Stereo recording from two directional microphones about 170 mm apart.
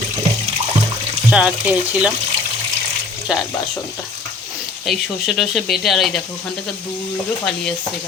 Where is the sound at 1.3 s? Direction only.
5° right (ahead or behind).